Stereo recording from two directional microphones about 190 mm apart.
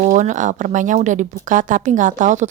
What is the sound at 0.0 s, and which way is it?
A woman's voice, 40° right (ahead or behind).